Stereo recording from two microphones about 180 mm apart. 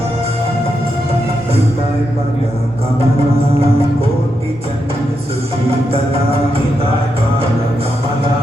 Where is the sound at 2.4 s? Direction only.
35° right (ahead or behind).